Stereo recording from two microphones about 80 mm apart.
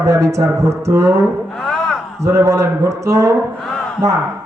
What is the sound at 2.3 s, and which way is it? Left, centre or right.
A man's voice, right.